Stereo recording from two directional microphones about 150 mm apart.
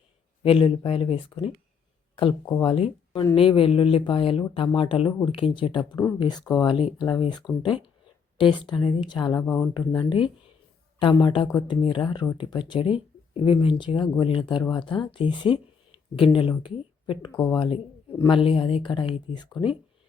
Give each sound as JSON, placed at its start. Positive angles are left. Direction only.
{"t": 0.4, "sound": "speech", "side_deg": 35}
{"t": 2.6, "sound": "speech", "side_deg": 40}
{"t": 9.4, "sound": "speech", "side_deg": 10}
{"t": 10.0, "sound": "speech", "side_deg": 35}